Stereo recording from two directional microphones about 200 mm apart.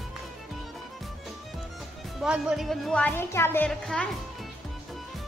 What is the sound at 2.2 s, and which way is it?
A woman's voice, 5° right (ahead or behind).